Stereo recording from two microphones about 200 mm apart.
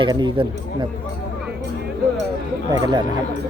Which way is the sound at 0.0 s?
25° right (ahead or behind).